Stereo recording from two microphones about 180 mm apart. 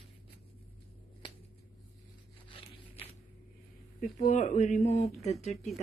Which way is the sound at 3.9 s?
45° left (ahead or behind).